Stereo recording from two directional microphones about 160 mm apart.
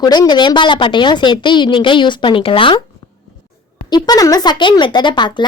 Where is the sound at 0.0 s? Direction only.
25° left (ahead or behind).